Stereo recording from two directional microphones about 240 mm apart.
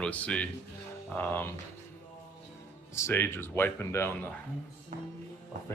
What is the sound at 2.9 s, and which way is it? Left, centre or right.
Speech, centre.